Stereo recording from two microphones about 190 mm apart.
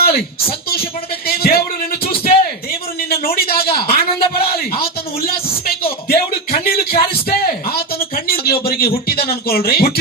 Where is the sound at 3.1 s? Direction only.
55° left (ahead or behind).